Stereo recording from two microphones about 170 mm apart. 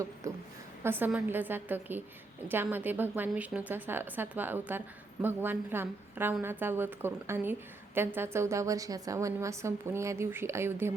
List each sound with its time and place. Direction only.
0.2 s a woman's voice: 20° right (ahead or behind)